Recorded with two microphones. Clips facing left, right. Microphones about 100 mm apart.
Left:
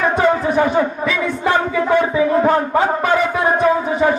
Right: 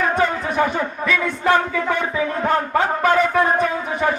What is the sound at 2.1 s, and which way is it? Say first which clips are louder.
Music: left 6 dB; 20° left (ahead or behind).